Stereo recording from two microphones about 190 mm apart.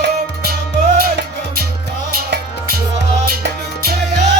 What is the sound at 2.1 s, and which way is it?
Music, 50° right (ahead or behind).